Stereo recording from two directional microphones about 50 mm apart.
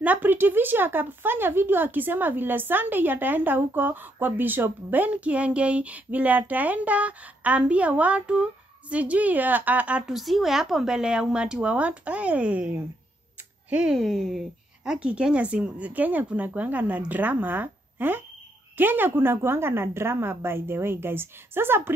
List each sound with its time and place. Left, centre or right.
0.0 s a woman's voice: right
10.0 s speech: centre; by 12.7 s right
13.9 s speech: centre
14.9 s a woman's voice: right